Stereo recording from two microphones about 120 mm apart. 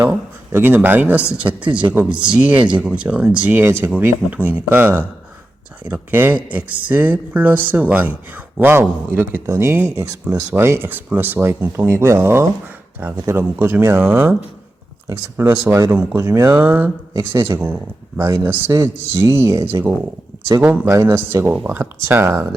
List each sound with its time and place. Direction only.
0.5 s speech: 20° right (ahead or behind)